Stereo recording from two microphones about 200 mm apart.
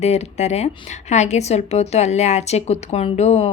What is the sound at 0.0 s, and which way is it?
A woman's voice, 35° left (ahead or behind).